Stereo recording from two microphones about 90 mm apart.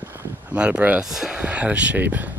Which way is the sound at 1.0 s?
5° right (ahead or behind).